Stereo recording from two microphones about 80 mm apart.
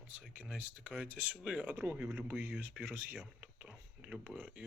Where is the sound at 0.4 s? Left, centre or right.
Centre.